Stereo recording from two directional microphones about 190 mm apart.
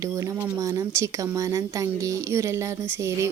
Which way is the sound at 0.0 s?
15° right (ahead or behind).